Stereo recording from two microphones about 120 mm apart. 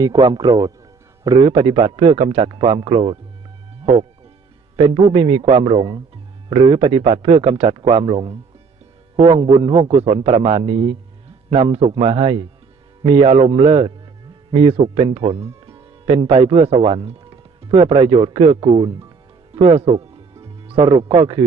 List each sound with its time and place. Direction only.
0.0 s a man's voice: 30° right (ahead or behind)
1.4 s a man's voice: 50° right (ahead or behind)
3.8 s speech: 65° right (ahead or behind)
4.8 s a man's voice: 45° right (ahead or behind)
11.5 s a man's voice: 50° right (ahead or behind)
17.2 s a man's voice: 40° right (ahead or behind)
19.5 s music: 55° right (ahead or behind)